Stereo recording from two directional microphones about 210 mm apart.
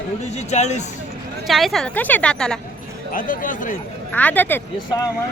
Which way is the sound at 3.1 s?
40° left (ahead or behind).